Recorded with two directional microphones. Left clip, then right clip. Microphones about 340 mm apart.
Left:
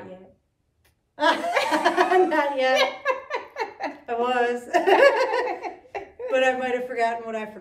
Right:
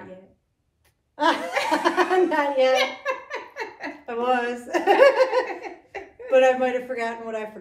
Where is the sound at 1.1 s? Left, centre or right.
Centre.